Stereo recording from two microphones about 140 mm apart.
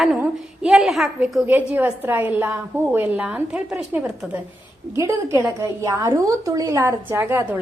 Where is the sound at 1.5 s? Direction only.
10° right (ahead or behind).